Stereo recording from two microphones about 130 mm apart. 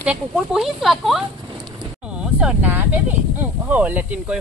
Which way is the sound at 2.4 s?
10° right (ahead or behind).